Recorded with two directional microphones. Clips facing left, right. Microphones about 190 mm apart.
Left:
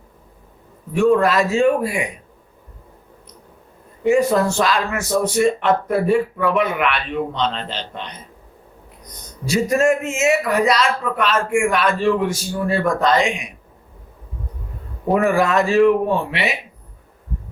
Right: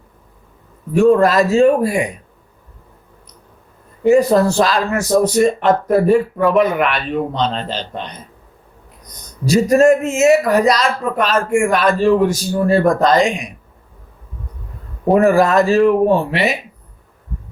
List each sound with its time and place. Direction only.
0.9 s speech: 40° right (ahead or behind)
4.0 s speech: 35° right (ahead or behind)
9.5 s speech: 40° right (ahead or behind)
15.1 s speech: 40° right (ahead or behind)